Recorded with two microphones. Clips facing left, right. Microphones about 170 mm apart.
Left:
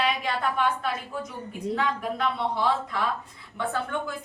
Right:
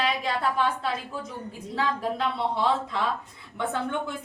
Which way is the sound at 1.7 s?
30° right (ahead or behind).